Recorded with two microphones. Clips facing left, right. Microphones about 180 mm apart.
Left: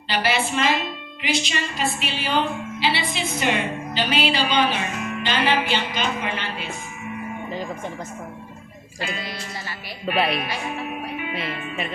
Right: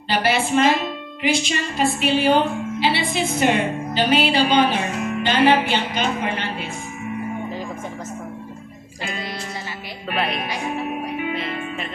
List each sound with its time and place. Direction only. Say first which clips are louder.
0.1 s a woman's voice: right 4 dB; 50° right (ahead or behind)
10.7 s music: right 4 dB; 45° right (ahead or behind)